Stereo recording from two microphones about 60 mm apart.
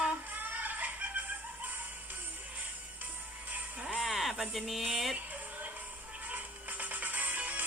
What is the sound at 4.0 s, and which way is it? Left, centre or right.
Speech, centre.